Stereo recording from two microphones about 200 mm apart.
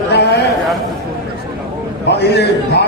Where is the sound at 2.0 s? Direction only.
55° left (ahead or behind).